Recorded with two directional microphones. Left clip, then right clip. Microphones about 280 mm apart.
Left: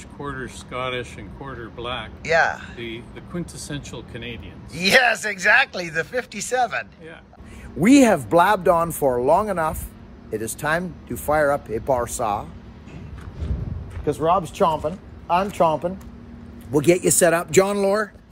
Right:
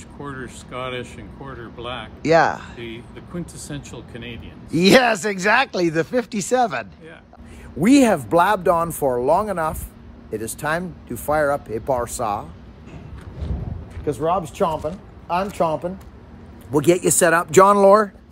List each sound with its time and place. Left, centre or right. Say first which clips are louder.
0.2 s speech: left 2 dB; centre
2.2 s speech: right 3 dB; right
3.7 s speech: left 1 dB; centre
4.6 s speech: right 2 dB; right
7.8 s speech: even; centre
14.0 s speech: left 1 dB; centre; by 18.1 s right